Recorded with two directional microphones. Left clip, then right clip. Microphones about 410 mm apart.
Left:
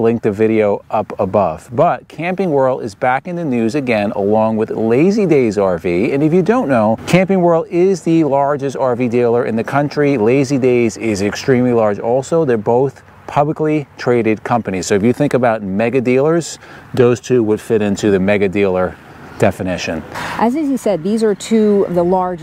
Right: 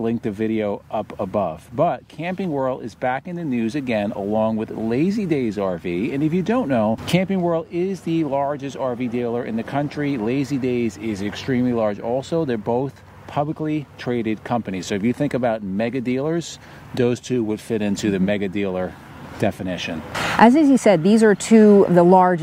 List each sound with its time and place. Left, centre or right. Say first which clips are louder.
0.0 s speech: left 10 dB; left
20.3 s speech: right 3 dB; centre